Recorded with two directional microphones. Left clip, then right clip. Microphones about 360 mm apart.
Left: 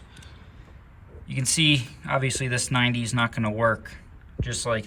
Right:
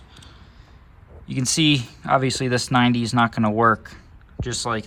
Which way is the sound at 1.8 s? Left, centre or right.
Centre.